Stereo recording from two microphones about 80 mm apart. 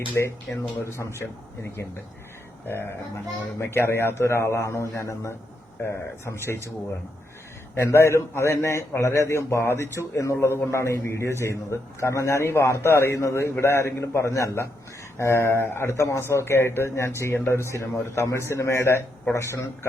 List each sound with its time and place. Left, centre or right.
0.2 s a man's voice: left
7.8 s a man's voice: left